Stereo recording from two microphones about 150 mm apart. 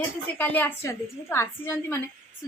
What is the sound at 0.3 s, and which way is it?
A woman's voice, 10° left (ahead or behind).